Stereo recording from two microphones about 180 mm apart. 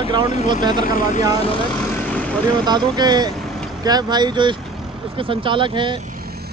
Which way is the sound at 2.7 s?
25° right (ahead or behind).